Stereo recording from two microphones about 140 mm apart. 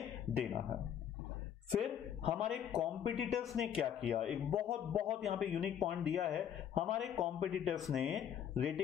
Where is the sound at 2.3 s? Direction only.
5° right (ahead or behind).